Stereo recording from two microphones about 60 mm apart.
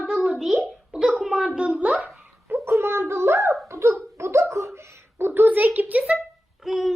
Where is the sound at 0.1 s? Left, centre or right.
Centre.